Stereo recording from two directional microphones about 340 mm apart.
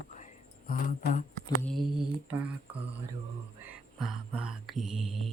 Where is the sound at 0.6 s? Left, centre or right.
Left.